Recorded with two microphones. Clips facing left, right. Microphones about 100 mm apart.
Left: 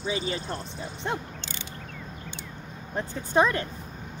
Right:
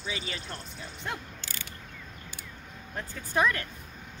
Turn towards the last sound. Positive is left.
turn(degrees=25)  # may be behind; listen again after turning